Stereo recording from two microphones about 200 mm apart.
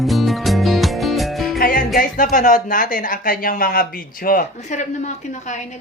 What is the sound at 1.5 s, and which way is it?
Music, 45° left (ahead or behind).